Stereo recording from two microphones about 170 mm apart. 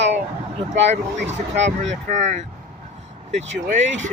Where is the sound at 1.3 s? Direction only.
40° right (ahead or behind).